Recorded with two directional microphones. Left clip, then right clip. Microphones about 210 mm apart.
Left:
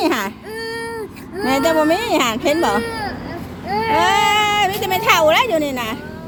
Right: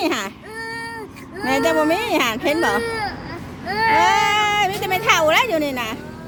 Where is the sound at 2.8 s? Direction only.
25° right (ahead or behind).